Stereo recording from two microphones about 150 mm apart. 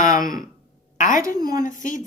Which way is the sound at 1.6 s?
60° left (ahead or behind).